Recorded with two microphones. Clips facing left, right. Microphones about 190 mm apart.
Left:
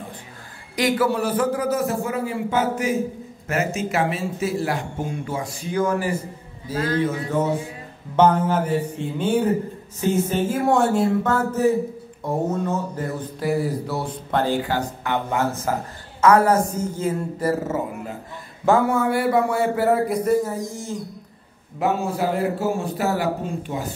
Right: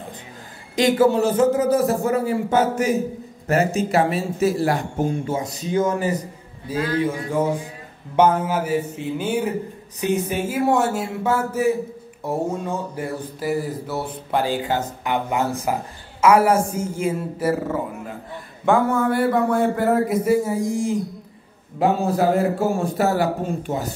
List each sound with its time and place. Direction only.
0.7 s a man's voice: 25° right (ahead or behind); by 5.0 s 40° right (ahead or behind)
5.2 s a man's voice: 25° right (ahead or behind); by 17.6 s 10° right (ahead or behind)
18.7 s speech: 10° left (ahead or behind); by 20.9 s 10° right (ahead or behind)
21.7 s a man's voice: 40° right (ahead or behind)